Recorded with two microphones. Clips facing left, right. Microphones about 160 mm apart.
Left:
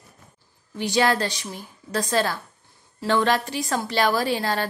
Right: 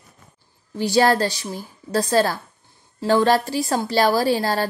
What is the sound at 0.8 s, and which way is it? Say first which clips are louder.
Speech: right 4 dB; 35° right (ahead or behind).